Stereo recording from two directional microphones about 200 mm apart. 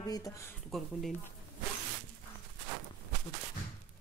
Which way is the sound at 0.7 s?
Centre (ahead or behind).